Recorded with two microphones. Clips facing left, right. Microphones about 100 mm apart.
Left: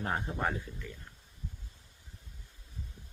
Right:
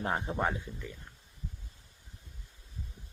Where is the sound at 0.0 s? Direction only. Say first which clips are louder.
Right 2 dB; 20° right (ahead or behind).